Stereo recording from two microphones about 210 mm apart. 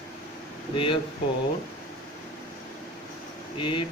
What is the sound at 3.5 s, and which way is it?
Speech, 25° left (ahead or behind).